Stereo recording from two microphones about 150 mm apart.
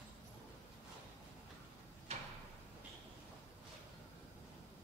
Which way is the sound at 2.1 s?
50° right (ahead or behind).